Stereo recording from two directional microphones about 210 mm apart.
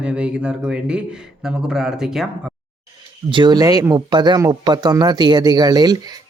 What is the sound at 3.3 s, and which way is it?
Speech, 20° right (ahead or behind).